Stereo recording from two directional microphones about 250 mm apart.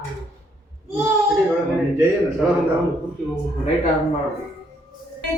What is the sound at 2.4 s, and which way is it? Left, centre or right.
Speech, centre.